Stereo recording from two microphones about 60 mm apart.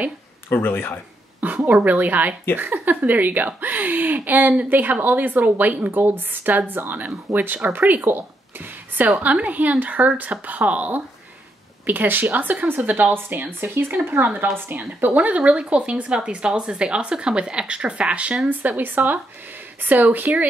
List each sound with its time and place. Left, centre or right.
0.5 s a man's voice: left
1.7 s a woman's voice: right
9.2 s a woman's voice: right
18.5 s a woman's voice: right